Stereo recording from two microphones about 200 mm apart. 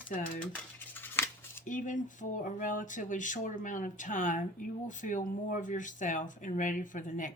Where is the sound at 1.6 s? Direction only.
40° left (ahead or behind).